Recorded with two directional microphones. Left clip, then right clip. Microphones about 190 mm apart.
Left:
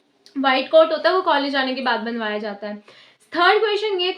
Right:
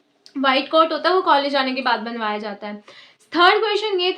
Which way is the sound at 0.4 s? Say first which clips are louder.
Left 2 dB; 30° right (ahead or behind).